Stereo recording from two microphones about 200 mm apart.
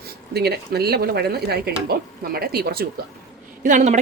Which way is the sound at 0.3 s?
55° right (ahead or behind).